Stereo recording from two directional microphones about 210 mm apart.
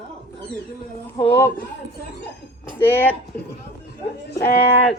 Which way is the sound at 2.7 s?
10° left (ahead or behind).